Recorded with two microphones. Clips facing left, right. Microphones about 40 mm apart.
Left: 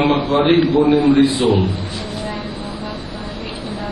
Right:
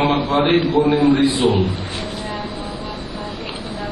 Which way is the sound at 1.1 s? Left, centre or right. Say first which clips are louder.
Left 2 dB; right.